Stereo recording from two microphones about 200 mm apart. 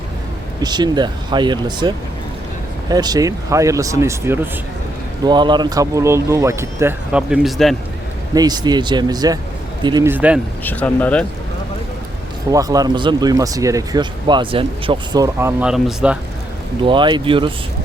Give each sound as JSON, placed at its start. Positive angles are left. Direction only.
{"t": 0.6, "sound": "speech", "side_deg": -20}
{"t": 2.9, "sound": "speech", "side_deg": -20}
{"t": 8.3, "sound": "speech", "side_deg": -20}
{"t": 10.6, "sound": "speech", "side_deg": 10}
{"t": 12.5, "sound": "speech", "side_deg": -20}
{"t": 16.8, "sound": "speech", "side_deg": -25}